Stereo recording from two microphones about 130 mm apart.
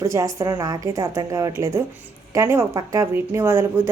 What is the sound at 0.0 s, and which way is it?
A woman's voice, 25° right (ahead or behind).